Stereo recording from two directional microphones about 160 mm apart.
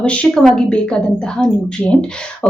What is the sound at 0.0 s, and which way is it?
A woman's voice, 5° left (ahead or behind).